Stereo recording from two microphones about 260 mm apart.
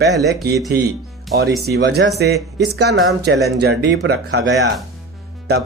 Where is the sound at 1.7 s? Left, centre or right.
Right.